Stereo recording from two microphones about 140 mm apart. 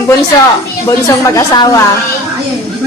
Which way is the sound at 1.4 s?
25° left (ahead or behind).